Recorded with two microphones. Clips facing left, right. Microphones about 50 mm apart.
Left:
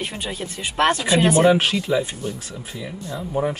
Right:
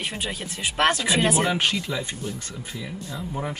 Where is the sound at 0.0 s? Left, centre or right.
Centre.